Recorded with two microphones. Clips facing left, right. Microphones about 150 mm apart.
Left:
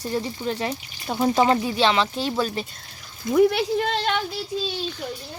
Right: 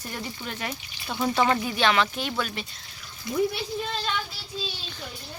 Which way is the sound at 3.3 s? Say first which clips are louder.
Left 8 dB; 70° left (ahead or behind).